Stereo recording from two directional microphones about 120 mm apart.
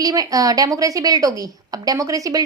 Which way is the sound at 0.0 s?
30° right (ahead or behind).